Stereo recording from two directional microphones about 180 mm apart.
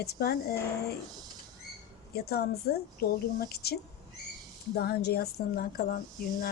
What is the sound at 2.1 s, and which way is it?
Speech, 60° left (ahead or behind).